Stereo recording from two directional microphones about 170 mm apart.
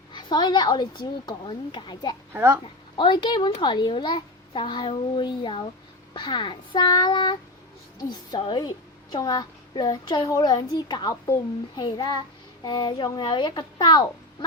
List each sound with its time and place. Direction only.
0.1 s a woman's voice: 25° left (ahead or behind)
2.3 s a child's voice: 15° right (ahead or behind)
3.0 s a woman's voice: 25° left (ahead or behind)